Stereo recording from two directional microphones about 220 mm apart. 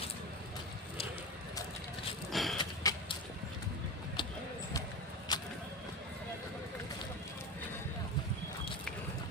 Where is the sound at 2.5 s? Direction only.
20° left (ahead or behind).